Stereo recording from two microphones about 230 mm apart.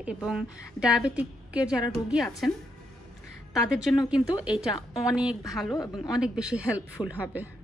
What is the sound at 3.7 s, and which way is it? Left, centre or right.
Speech, centre.